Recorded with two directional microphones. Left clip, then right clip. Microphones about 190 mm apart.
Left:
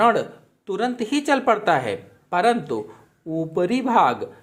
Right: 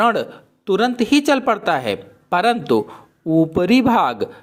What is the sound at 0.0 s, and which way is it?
A man's voice, 30° right (ahead or behind).